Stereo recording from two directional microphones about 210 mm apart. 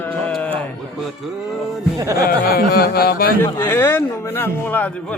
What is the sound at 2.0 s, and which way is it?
Speech, 15° right (ahead or behind).